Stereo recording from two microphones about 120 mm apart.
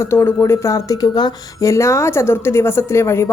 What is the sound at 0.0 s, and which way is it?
A woman's voice, 20° left (ahead or behind).